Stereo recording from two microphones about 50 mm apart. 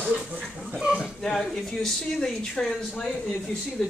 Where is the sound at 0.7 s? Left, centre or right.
Centre.